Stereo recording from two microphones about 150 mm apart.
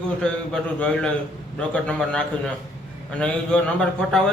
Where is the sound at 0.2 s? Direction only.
5° left (ahead or behind).